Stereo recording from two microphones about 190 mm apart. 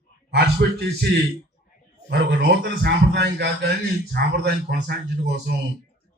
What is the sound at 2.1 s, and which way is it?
A man's voice, 60° right (ahead or behind).